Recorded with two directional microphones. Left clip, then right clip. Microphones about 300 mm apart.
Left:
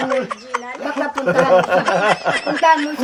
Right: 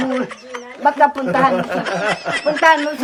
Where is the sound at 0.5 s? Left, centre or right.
Left.